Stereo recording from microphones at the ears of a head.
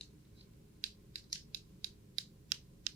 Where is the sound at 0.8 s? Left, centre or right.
Right.